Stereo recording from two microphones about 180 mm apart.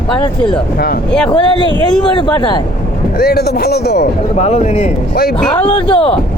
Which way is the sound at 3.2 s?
65° left (ahead or behind).